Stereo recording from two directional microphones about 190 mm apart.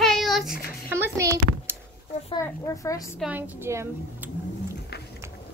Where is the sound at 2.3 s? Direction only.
15° left (ahead or behind).